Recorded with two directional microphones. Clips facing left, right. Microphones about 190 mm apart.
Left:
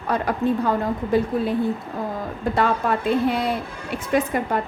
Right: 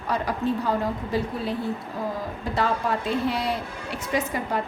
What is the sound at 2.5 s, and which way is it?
A woman's voice, 55° left (ahead or behind).